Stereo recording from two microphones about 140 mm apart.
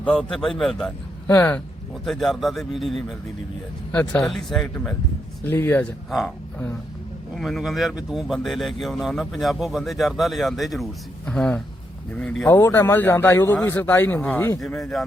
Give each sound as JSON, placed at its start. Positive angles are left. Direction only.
{"t": 0.0, "sound": "a man's voice", "side_deg": 5}
{"t": 6.1, "sound": "a man's voice", "side_deg": 0}
{"t": 7.3, "sound": "a man's voice", "side_deg": 0}
{"t": 14.6, "sound": "a man's voice", "side_deg": 5}